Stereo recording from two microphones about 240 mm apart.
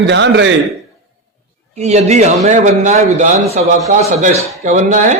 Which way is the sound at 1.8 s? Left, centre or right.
Right.